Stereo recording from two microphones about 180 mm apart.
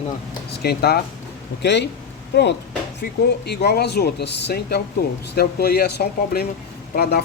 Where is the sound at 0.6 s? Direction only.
60° left (ahead or behind).